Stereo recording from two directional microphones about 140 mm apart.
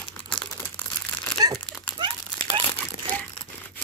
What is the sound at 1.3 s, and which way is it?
Crumpling, 30° right (ahead or behind).